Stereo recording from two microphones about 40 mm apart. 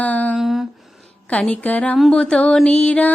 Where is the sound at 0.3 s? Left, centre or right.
Centre.